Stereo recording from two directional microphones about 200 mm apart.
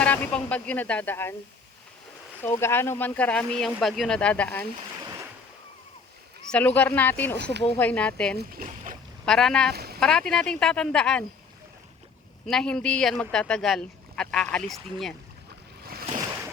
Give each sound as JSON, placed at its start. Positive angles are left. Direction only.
{"t": 0.0, "sound": "speech", "side_deg": 10}
{"t": 2.4, "sound": "speech", "side_deg": 10}
{"t": 6.5, "sound": "speech", "side_deg": 10}
{"t": 8.4, "sound": "speech", "side_deg": -45}
{"t": 9.2, "sound": "speech", "side_deg": 5}
{"t": 9.7, "sound": "speech", "side_deg": -50}
{"t": 10.0, "sound": "speech", "side_deg": 5}
{"t": 12.5, "sound": "speech", "side_deg": 5}